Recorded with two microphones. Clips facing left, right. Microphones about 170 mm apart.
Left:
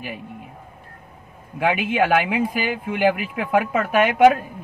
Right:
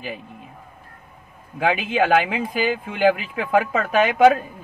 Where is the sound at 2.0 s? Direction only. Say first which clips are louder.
Even; 10° left (ahead or behind).